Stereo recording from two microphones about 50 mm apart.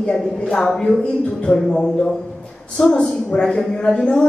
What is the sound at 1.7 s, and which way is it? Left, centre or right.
A woman's voice, centre.